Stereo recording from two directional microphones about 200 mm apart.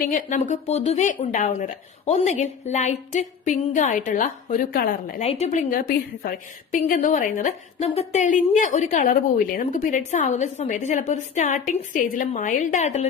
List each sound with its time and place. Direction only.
0.0 s a woman's voice: 40° left (ahead or behind)
5.2 s a woman's voice: 30° left (ahead or behind)